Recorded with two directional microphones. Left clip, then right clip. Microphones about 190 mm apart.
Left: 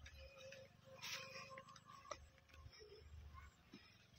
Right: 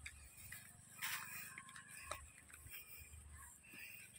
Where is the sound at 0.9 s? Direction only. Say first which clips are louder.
Right 4 dB; 55° right (ahead or behind).